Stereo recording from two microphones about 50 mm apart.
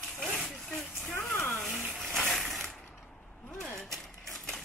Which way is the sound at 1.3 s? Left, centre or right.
Left.